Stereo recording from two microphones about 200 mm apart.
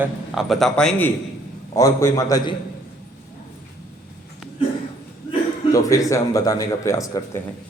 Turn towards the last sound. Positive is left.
turn(degrees=15)  # may be behind; listen again after turning